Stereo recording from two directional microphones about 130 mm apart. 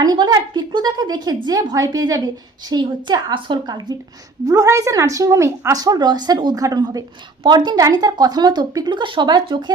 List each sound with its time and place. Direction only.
0.0 s a woman's voice: 30° right (ahead or behind)